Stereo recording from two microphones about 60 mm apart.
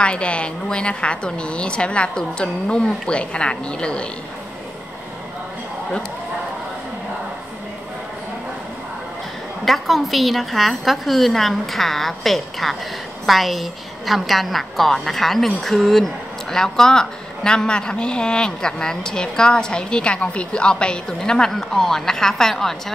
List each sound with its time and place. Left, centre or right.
0.0 s speech: centre
9.7 s a woman's voice: centre